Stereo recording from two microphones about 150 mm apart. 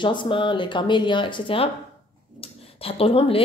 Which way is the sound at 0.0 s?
30° left (ahead or behind).